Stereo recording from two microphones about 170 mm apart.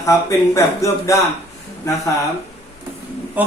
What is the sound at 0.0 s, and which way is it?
Speech, 20° left (ahead or behind).